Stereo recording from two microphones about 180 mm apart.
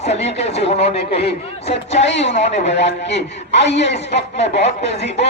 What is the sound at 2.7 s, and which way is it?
A man's voice, 75° left (ahead or behind).